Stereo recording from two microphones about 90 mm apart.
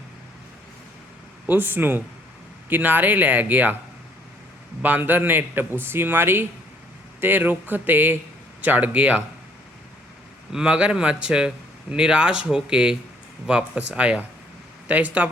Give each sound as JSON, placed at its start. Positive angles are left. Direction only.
{"t": 1.5, "sound": "speech", "side_deg": -20}
{"t": 4.8, "sound": "speech", "side_deg": -20}
{"t": 10.5, "sound": "speech", "side_deg": -10}